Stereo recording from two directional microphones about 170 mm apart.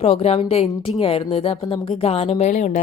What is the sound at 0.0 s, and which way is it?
A woman's voice, 35° left (ahead or behind).